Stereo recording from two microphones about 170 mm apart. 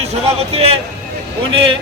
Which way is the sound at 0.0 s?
40° right (ahead or behind).